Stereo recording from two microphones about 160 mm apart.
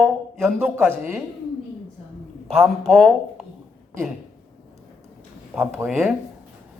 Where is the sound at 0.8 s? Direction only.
15° right (ahead or behind).